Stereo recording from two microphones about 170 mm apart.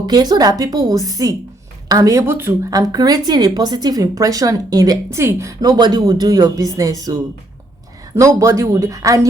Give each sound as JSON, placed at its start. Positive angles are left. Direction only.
{"t": 0.0, "sound": "a woman's voice", "side_deg": -25}